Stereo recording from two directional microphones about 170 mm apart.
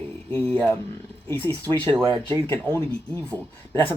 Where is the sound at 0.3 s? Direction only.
10° left (ahead or behind).